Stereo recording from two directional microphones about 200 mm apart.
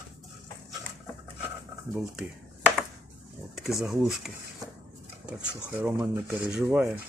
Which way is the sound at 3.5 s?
Centre (ahead or behind).